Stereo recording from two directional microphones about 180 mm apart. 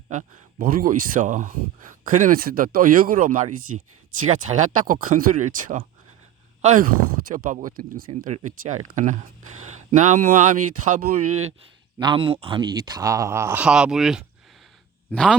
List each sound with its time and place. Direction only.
0.1 s speech: 50° right (ahead or behind)
11.9 s a man's voice: 25° right (ahead or behind); by 15.4 s 5° left (ahead or behind)